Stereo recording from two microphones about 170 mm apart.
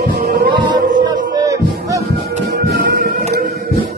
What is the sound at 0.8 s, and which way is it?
Music, 25° right (ahead or behind).